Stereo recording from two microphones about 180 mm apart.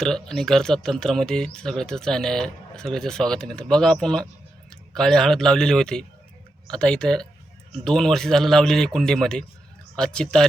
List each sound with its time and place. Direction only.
0.0 s speech: centre (ahead or behind)